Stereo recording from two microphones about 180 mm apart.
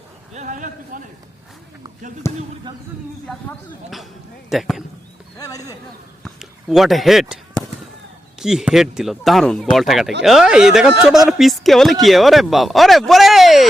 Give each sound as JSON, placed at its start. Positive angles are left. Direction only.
{"t": 0.3, "sound": "a man's voice", "side_deg": -45}
{"t": 2.3, "sound": "speech", "side_deg": 15}
{"t": 3.2, "sound": "speech", "side_deg": 0}
{"t": 5.4, "sound": "speech", "side_deg": 20}
{"t": 6.2, "sound": "a sound", "side_deg": 0}
{"t": 8.4, "sound": "speech", "side_deg": -5}